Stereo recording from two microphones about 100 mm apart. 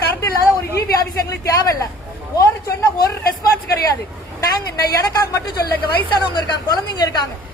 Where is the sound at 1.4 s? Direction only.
35° left (ahead or behind).